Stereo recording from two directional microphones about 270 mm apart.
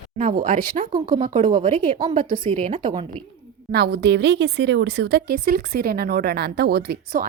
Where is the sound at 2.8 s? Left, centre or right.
Centre.